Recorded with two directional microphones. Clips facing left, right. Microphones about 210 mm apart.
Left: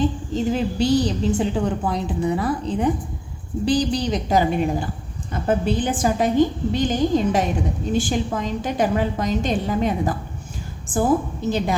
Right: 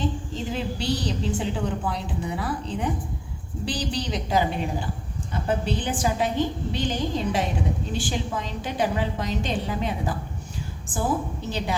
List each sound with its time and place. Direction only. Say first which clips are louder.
0.5 s a woman's voice: left 8 dB; 45° left (ahead or behind)